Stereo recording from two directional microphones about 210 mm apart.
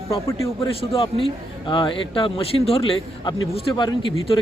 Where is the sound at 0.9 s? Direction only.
25° left (ahead or behind).